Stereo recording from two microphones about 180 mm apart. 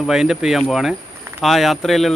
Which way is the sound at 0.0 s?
5° right (ahead or behind).